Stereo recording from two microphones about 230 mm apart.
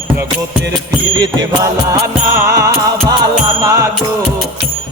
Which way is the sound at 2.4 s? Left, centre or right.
Centre.